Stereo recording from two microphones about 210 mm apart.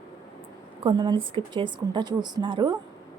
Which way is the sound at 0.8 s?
25° right (ahead or behind).